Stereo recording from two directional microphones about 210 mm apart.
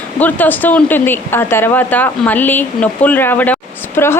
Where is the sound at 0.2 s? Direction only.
10° left (ahead or behind).